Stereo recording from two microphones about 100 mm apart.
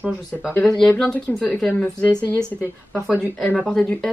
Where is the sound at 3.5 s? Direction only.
5° left (ahead or behind).